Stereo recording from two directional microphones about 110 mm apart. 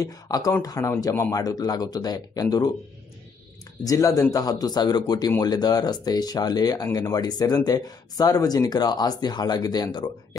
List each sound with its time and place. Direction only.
0.0 s a man's voice: 35° left (ahead or behind)
3.8 s speech: 30° left (ahead or behind)